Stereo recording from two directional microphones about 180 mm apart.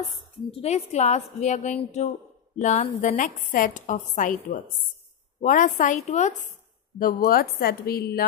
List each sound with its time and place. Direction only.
0.5 s a woman's voice: 35° left (ahead or behind)
7.0 s a woman's voice: 55° left (ahead or behind)